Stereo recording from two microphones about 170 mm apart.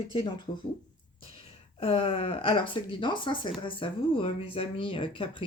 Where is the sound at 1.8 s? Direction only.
35° left (ahead or behind).